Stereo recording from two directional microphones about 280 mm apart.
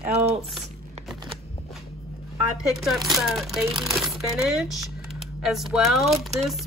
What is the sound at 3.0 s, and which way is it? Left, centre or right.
Speech, centre.